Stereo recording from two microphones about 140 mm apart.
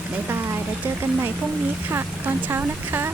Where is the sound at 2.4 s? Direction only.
15° right (ahead or behind).